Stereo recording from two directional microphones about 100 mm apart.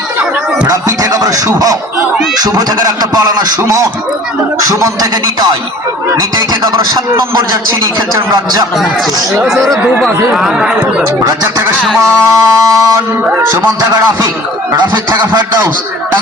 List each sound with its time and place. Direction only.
0.7 s music: 35° right (ahead or behind)
2.4 s speech: 40° right (ahead or behind)
10.3 s speech: 5° right (ahead or behind)
11.9 s speech: 30° right (ahead or behind)
13.5 s music: 25° right (ahead or behind)